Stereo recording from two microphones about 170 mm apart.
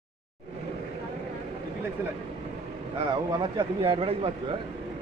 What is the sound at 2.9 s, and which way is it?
A man's voice, 25° right (ahead or behind).